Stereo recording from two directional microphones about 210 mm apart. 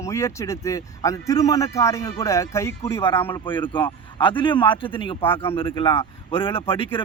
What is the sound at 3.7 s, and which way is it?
Speech, 25° left (ahead or behind).